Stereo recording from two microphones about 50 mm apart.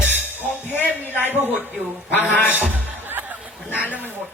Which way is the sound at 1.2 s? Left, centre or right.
Right.